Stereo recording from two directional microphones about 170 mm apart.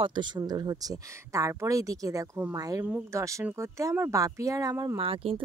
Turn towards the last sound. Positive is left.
turn(degrees=-35)  # may be behind; listen again after turning